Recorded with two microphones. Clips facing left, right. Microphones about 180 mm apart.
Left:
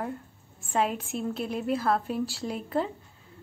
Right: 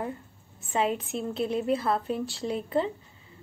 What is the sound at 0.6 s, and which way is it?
A woman's voice, centre (ahead or behind).